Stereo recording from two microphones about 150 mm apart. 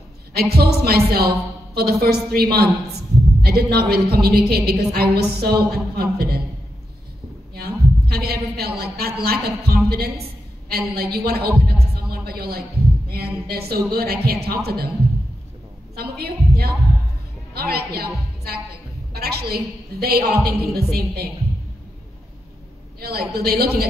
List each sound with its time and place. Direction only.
0.3 s a woman's voice: 90° right
7.5 s a woman's voice: 90° right
16.0 s a woman's voice: 90° right
22.9 s a woman's voice: 90° right